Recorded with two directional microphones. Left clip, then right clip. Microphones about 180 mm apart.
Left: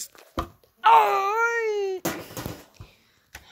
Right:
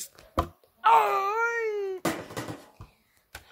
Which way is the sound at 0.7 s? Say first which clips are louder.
Left 4 dB; 15° left (ahead or behind).